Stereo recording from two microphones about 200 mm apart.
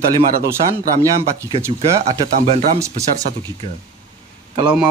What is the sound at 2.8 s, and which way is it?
Speech, 15° right (ahead or behind).